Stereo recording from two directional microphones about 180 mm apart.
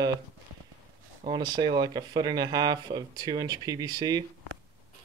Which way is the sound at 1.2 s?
25° right (ahead or behind).